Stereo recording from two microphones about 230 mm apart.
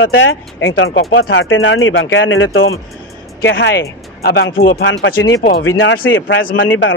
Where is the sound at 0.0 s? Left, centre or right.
Left.